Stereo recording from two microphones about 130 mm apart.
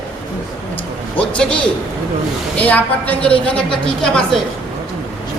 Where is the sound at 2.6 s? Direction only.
10° left (ahead or behind).